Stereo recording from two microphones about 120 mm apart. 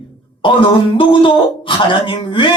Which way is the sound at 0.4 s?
45° left (ahead or behind).